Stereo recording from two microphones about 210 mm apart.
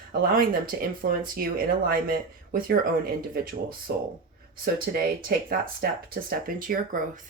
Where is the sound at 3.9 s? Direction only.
50° right (ahead or behind).